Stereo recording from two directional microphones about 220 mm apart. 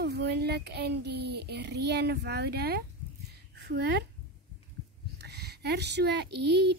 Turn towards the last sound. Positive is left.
turn(degrees=-50)  # may be behind; listen again after turning